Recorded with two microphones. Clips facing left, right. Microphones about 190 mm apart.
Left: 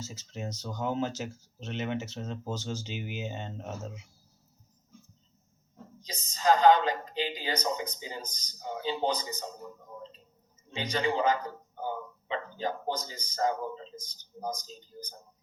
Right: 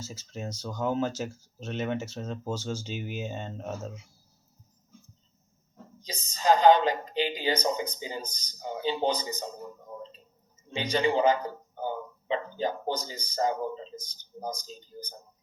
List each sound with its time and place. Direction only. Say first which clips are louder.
0.0 s speech: right 1 dB; 20° left (ahead or behind)
6.1 s speech: right 1 dB; 30° right (ahead or behind)
10.7 s speech: right 4 dB; 30° right (ahead or behind)